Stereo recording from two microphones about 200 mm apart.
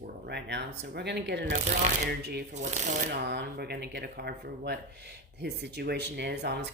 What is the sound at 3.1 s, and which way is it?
Speech, 55° right (ahead or behind).